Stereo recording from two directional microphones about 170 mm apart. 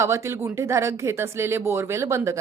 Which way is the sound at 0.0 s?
15° right (ahead or behind).